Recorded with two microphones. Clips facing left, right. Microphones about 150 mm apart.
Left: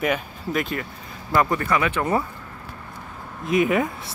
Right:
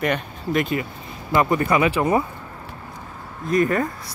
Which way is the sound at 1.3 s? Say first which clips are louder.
Right 2 dB; 15° right (ahead or behind).